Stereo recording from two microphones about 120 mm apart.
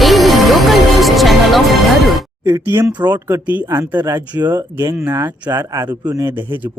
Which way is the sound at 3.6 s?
20° right (ahead or behind).